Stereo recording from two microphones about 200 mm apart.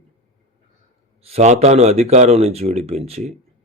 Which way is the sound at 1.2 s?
35° right (ahead or behind).